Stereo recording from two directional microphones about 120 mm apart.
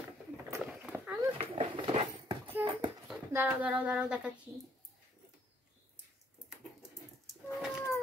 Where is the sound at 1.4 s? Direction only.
50° right (ahead or behind).